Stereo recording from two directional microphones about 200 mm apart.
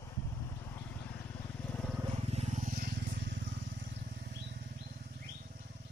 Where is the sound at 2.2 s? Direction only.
30° right (ahead or behind); by 4.0 s 60° right (ahead or behind).